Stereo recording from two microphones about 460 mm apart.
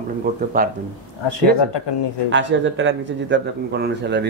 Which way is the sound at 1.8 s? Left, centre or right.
Left.